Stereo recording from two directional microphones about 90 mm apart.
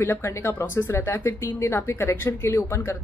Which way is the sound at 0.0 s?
30° left (ahead or behind).